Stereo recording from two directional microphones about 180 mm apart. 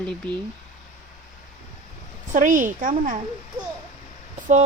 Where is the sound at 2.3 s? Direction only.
45° right (ahead or behind).